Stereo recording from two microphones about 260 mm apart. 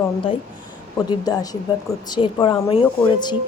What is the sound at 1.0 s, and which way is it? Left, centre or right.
Speech, centre.